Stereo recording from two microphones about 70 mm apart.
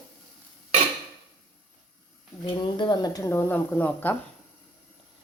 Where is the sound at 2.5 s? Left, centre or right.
Left.